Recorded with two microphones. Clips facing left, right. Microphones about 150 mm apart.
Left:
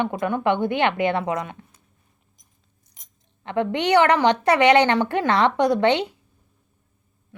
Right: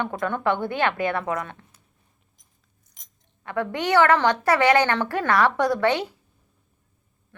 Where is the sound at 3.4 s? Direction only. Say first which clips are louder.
Left 4 dB; 20° left (ahead or behind).